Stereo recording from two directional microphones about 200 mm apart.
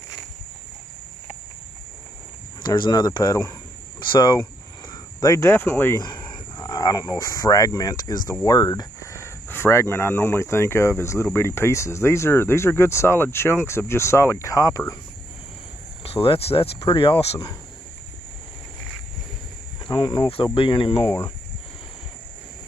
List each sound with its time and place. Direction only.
2.6 s speech: 20° left (ahead or behind)
16.0 s speech: 30° left (ahead or behind)
19.8 s speech: 25° left (ahead or behind)